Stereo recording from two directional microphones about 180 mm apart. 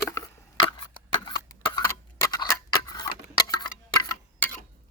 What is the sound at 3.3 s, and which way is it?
Tick-tock, 25° left (ahead or behind).